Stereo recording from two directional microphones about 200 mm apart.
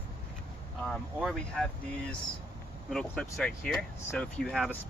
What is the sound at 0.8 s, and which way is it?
Speech, centre (ahead or behind).